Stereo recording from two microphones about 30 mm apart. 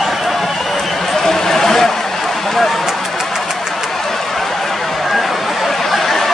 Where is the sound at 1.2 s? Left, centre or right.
Centre.